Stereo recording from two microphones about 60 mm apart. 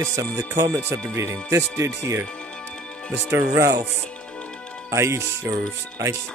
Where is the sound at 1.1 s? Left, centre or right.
Right.